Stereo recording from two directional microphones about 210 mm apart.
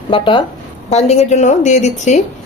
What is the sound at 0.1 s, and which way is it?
Speech, 25° left (ahead or behind).